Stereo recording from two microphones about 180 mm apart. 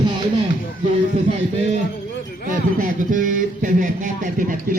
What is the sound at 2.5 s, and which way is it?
A man's voice, 50° right (ahead or behind).